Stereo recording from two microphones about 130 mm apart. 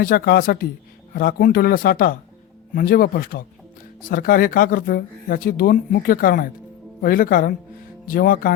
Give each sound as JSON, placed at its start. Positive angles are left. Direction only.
{"t": 0.5, "sound": "speech", "side_deg": 90}